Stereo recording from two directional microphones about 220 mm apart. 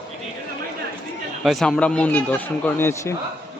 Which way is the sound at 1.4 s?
Centre (ahead or behind).